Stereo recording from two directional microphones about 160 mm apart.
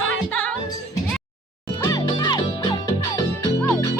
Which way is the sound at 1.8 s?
20° left (ahead or behind).